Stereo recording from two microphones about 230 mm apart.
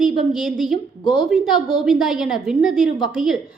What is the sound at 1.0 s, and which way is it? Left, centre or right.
Speech, centre.